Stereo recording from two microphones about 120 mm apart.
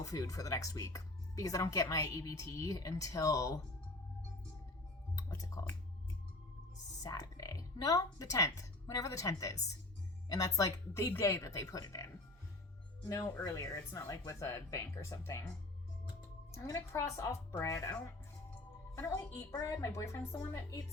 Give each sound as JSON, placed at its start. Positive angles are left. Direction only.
{"t": 0.0, "sound": "speech", "side_deg": 30}
{"t": 5.1, "sound": "music", "side_deg": 30}
{"t": 7.0, "sound": "speech", "side_deg": 30}
{"t": 13.1, "sound": "speech", "side_deg": 30}
{"t": 16.6, "sound": "speech", "side_deg": 25}
{"t": 18.9, "sound": "speech", "side_deg": 30}